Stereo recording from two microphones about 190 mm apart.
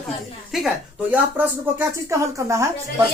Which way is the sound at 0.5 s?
5° right (ahead or behind).